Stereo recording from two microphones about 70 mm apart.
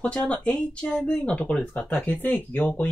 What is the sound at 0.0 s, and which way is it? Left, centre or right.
Speech, centre.